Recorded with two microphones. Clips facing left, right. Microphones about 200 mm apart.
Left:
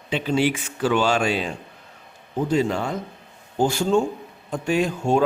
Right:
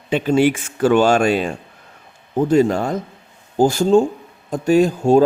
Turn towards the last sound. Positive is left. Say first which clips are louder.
# right 8 dB
turn(degrees=-35)  # may be behind; listen again after turning